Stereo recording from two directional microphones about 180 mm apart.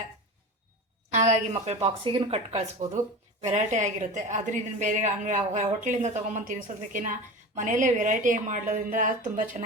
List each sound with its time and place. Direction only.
1.3 s a woman's voice: 35° right (ahead or behind)